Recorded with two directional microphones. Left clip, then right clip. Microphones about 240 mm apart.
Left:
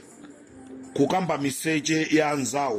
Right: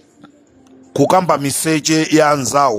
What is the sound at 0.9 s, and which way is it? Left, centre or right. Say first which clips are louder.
Speech: right 11 dB; right.